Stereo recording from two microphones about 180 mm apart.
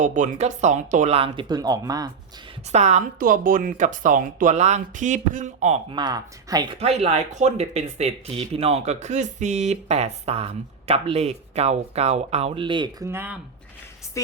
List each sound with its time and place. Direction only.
0.0 s speech: 45° right (ahead or behind); by 2.0 s 20° right (ahead or behind)
2.7 s speech: 40° right (ahead or behind)
5.9 s speech: 25° right (ahead or behind)
6.7 s speech: 35° right (ahead or behind)
13.1 s speech: 10° right (ahead or behind)